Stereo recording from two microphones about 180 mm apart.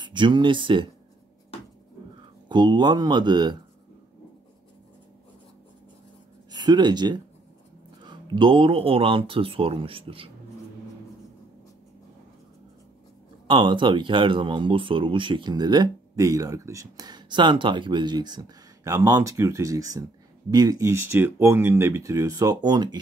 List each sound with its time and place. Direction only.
0.0 s speech: 25° right (ahead or behind)
2.4 s speech: 25° right (ahead or behind)
6.5 s speech: 25° right (ahead or behind)
13.5 s speech: 25° right (ahead or behind)